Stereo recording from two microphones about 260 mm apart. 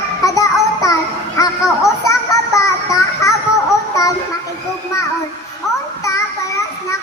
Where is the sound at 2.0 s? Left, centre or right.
Centre.